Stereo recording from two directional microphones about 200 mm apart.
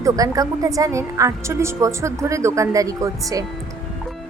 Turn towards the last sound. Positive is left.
turn(degrees=-15)  # may be behind; listen again after turning